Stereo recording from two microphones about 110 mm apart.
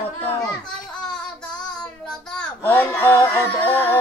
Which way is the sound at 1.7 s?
5° left (ahead or behind).